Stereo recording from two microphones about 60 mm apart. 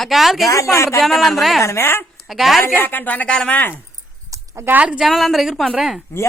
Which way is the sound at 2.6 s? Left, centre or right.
Left.